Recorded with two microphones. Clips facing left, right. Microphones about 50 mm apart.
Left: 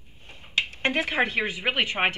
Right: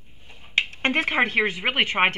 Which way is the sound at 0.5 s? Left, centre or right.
Right.